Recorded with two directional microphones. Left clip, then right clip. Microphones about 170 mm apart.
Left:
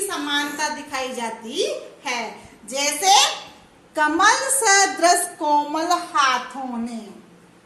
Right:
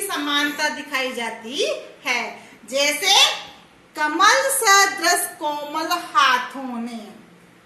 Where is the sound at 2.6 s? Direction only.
60° left (ahead or behind).